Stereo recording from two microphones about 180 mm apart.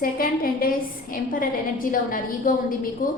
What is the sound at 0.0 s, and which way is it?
A woman's voice, 55° left (ahead or behind).